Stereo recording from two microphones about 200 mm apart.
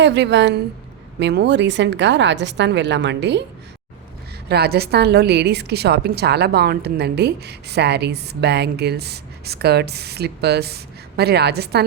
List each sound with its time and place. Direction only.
0.0 s a woman's voice: 60° right (ahead or behind)
4.4 s a woman's voice: 55° right (ahead or behind)